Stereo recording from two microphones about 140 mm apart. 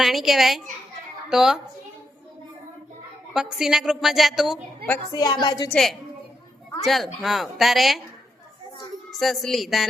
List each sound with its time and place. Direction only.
0.0 s a woman's voice: centre (ahead or behind)
3.3 s a woman's voice: 5° right (ahead or behind)
5.1 s a woman's voice: 30° left (ahead or behind)
5.7 s a woman's voice: centre (ahead or behind)
9.0 s a woman's voice: centre (ahead or behind)